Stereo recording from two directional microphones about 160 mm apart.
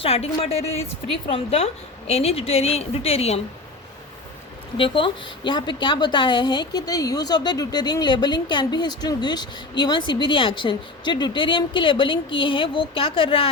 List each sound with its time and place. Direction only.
0.0 s a woman's voice: 40° left (ahead or behind)
4.8 s a woman's voice: 30° left (ahead or behind)